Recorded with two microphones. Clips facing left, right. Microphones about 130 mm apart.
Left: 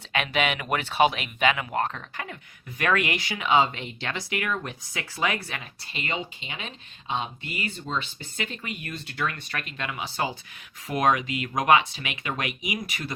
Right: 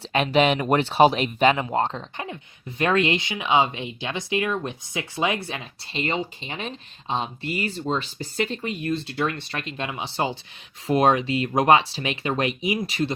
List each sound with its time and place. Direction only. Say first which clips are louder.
0.0 s speech: right 7 dB; 35° right (ahead or behind)